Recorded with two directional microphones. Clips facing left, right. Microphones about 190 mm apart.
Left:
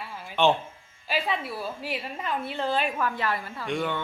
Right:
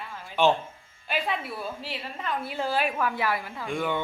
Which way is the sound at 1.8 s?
10° left (ahead or behind).